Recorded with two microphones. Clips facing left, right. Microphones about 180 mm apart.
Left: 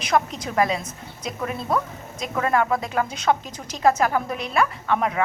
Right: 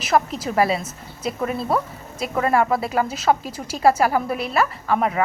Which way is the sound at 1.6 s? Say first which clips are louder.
Even; 30° right (ahead or behind).